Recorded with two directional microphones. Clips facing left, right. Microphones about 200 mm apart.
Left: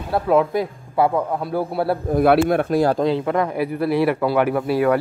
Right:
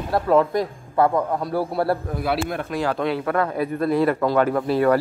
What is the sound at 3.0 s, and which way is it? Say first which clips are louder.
A man's voice: left 3 dB; 20° left (ahead or behind).